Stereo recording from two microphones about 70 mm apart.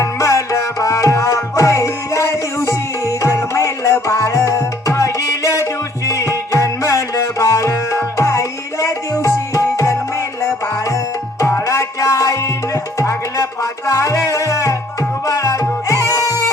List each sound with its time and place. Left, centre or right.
0.0 s music: left
11.3 s music: left